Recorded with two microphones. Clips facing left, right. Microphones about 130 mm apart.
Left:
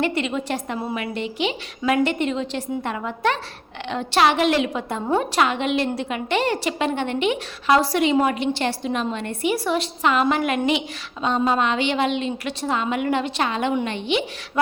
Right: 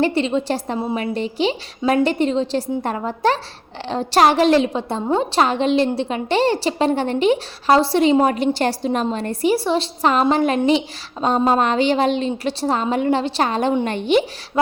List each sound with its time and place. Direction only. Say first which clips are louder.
0.0 s a woman's voice: right 5 dB; 30° right (ahead or behind)